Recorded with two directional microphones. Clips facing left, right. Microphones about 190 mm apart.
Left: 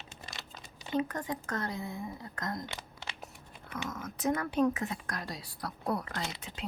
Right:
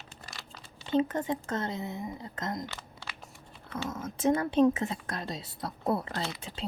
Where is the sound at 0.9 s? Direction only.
25° right (ahead or behind).